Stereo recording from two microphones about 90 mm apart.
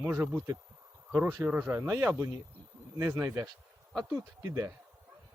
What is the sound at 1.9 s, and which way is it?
A man's voice, 30° right (ahead or behind).